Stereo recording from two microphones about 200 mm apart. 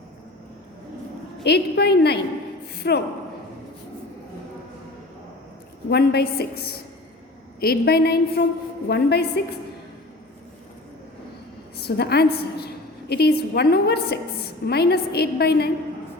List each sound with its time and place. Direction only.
1.5 s a woman's voice: 55° left (ahead or behind)
5.9 s a woman's voice: 55° left (ahead or behind)
11.8 s a woman's voice: 55° left (ahead or behind)